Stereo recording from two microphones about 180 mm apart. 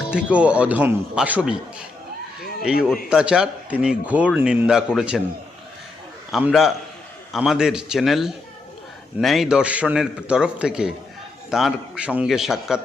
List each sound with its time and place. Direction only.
0.1 s speech: 5° right (ahead or behind)
2.4 s a sound: 55° left (ahead or behind)
2.8 s speech: 5° right (ahead or behind)
6.3 s speech: centre (ahead or behind)